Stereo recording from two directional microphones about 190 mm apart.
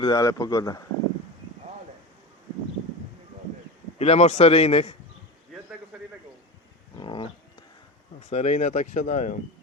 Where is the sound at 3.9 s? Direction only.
35° left (ahead or behind).